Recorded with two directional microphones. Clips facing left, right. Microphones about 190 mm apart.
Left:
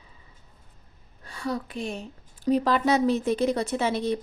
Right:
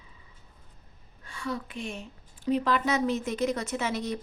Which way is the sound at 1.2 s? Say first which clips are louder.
Left 4 dB; 35° left (ahead or behind).